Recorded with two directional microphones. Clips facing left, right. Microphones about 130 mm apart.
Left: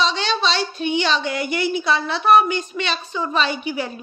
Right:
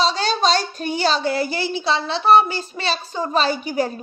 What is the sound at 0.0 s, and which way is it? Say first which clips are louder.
A woman's voice: right 2 dB; 40° right (ahead or behind).